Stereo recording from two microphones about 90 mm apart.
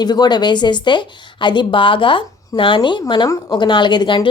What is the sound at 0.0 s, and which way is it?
A woman's voice, 50° left (ahead or behind).